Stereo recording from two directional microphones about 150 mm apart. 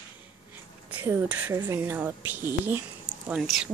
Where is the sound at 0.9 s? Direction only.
15° right (ahead or behind).